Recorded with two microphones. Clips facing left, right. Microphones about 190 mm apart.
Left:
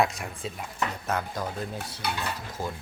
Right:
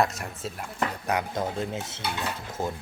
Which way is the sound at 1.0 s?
15° right (ahead or behind).